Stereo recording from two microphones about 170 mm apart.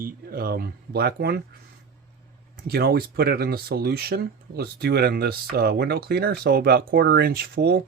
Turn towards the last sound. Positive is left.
turn(degrees=-65)  # may be behind; listen again after turning